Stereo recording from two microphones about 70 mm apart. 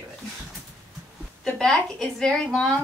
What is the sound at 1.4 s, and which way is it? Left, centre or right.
Speech, centre.